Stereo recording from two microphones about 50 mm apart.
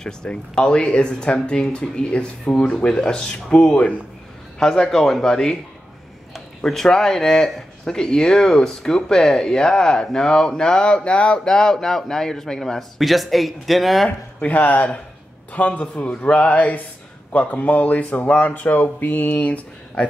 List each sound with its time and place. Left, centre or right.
0.3 s speech: centre
4.6 s speech: centre
6.6 s speech: centre
14.0 s speech: left
19.3 s speech: left